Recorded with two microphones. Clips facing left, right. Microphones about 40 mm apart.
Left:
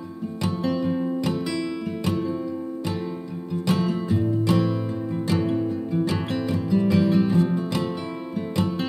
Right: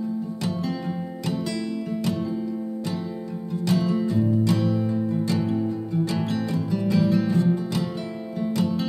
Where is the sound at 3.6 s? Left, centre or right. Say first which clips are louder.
Right 1 dB; left.